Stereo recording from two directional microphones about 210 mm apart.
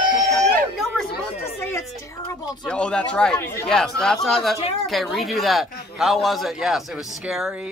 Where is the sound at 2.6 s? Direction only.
5° left (ahead or behind).